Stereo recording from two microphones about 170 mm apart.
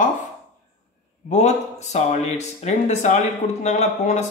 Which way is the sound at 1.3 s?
45° left (ahead or behind).